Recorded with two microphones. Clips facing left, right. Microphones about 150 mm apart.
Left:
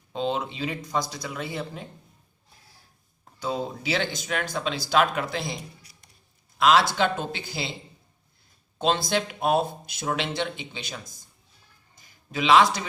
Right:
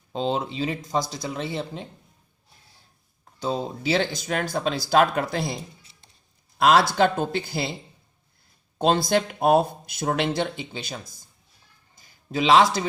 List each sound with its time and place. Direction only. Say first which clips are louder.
0.1 s speech: right 2 dB; 35° right (ahead or behind)
3.4 s speech: right 3 dB; 30° right (ahead or behind)
5.8 s a sound: left 1 dB; 25° right (ahead or behind)
6.6 s speech: right 2 dB; 45° right (ahead or behind)
8.8 s speech: right 4 dB; 45° right (ahead or behind)
11.9 s a sound: right 4 dB; 35° right (ahead or behind)